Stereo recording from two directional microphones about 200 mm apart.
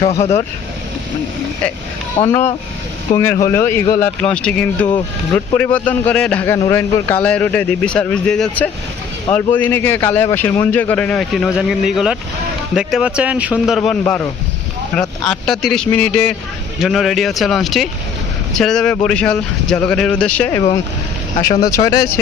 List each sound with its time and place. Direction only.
0.2 s speech: 30° left (ahead or behind)
2.1 s a man's voice: 15° left (ahead or behind)
3.1 s speech: 45° left (ahead or behind)
3.4 s a man's voice: 10° left (ahead or behind)
21.7 s a man's voice: 20° left (ahead or behind)